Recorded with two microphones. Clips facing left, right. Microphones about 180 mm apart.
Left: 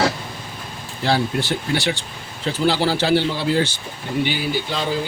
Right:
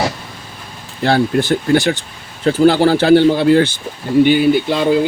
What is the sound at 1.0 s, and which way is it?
Speech, 50° right (ahead or behind).